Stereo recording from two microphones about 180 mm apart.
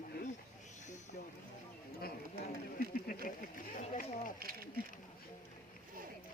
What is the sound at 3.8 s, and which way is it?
Run, 45° left (ahead or behind).